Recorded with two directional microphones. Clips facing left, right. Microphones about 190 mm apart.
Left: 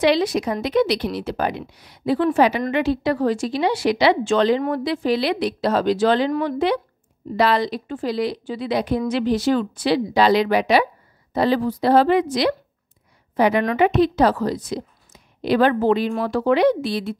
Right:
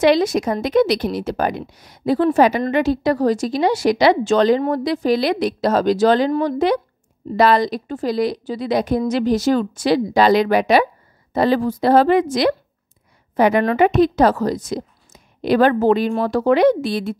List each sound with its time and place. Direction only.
0.0 s a woman's voice: 45° right (ahead or behind)